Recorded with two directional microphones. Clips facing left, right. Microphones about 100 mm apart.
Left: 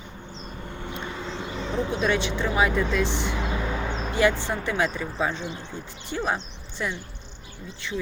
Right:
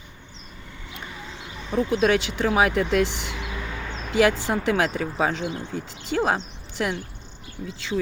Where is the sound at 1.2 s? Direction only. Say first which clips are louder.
Left 7 dB; 75° left (ahead or behind).